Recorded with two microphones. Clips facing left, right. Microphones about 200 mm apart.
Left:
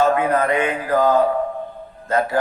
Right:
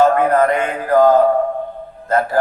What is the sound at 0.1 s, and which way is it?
Speech, 50° right (ahead or behind).